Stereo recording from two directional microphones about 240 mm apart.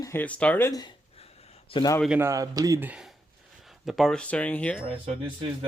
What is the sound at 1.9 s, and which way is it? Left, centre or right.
Speech, centre.